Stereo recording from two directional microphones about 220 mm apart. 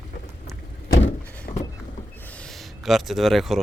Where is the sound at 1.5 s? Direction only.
25° left (ahead or behind).